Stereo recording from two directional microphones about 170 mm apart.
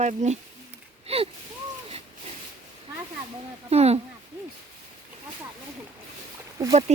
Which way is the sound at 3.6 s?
40° right (ahead or behind).